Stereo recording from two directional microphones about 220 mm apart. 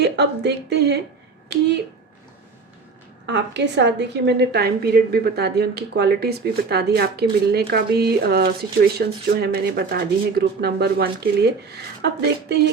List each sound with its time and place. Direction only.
0.0 s a woman's voice: 50° right (ahead or behind)
3.2 s a woman's voice: 50° right (ahead or behind)